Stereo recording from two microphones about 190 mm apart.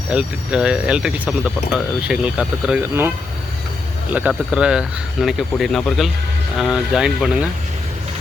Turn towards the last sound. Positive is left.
turn(degrees=-5)  # may be behind; listen again after turning